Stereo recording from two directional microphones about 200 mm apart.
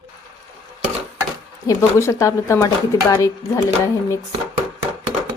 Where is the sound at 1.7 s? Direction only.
15° left (ahead or behind).